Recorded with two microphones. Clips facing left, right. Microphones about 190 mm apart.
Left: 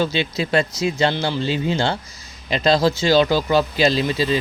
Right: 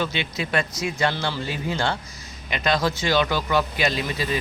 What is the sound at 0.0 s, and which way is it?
Speech, 30° left (ahead or behind).